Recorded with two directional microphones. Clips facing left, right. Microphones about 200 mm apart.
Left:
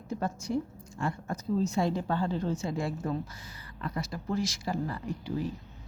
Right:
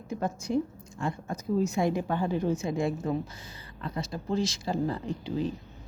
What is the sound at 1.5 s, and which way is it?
A woman's voice, 10° right (ahead or behind).